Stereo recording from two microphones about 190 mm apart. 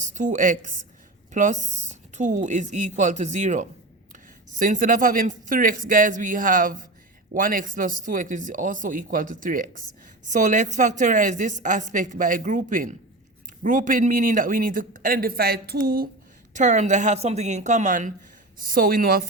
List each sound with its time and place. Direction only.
0.0 s a woman's voice: 40° right (ahead or behind)
16.6 s a woman's voice: 40° right (ahead or behind)